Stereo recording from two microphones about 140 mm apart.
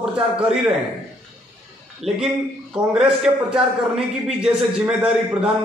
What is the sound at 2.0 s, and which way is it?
A man's voice, 5° right (ahead or behind).